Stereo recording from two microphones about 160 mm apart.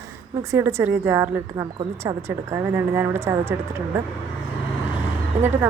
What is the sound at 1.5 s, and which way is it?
A woman's voice, 25° right (ahead or behind).